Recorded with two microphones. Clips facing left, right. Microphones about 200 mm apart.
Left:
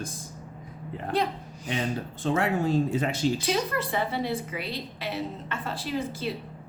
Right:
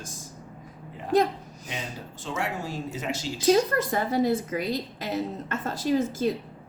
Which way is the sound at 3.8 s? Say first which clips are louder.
Right 4 dB; 40° right (ahead or behind).